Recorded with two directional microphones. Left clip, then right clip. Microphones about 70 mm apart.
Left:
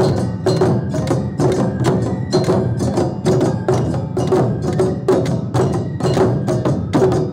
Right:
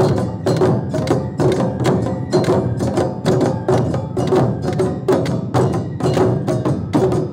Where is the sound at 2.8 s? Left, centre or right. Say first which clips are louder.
Even; right.